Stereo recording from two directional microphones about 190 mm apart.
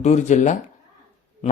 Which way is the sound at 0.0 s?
40° left (ahead or behind).